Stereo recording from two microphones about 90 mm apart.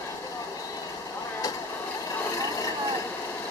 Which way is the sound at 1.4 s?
40° left (ahead or behind).